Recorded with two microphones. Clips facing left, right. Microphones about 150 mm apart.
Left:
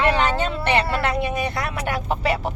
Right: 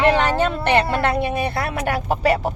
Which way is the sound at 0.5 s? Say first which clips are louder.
Right 3 dB; 45° right (ahead or behind).